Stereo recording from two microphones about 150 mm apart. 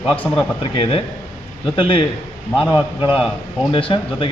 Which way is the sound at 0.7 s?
40° left (ahead or behind).